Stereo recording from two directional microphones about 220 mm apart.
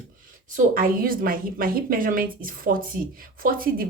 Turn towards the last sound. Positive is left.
turn(degrees=-40)  # may be behind; listen again after turning